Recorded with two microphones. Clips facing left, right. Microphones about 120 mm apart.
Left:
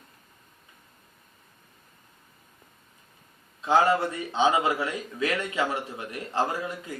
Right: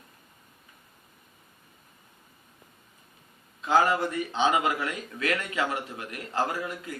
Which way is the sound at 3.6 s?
25° left (ahead or behind).